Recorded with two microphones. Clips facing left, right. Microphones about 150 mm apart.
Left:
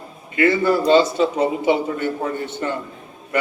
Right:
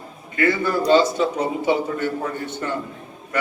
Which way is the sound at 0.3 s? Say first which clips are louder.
Left 3 dB; 20° left (ahead or behind).